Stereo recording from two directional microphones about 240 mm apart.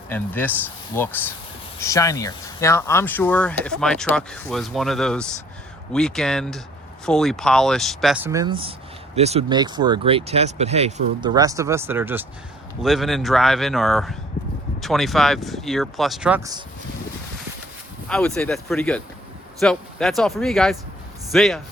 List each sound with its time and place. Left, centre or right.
0.1 s speech: centre
18.1 s speech: centre